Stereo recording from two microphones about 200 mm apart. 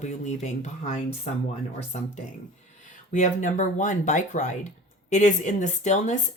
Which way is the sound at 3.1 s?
40° left (ahead or behind).